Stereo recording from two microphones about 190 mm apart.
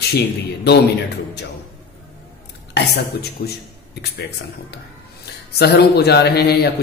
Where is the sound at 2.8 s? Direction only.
60° left (ahead or behind).